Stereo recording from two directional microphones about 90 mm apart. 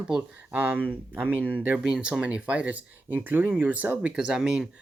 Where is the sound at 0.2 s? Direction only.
20° right (ahead or behind).